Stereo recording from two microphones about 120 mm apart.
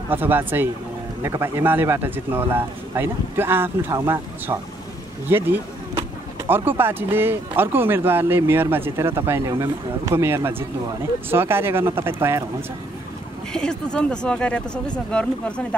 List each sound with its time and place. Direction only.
0.1 s a man's voice: 15° right (ahead or behind)
13.5 s speech: 5° left (ahead or behind)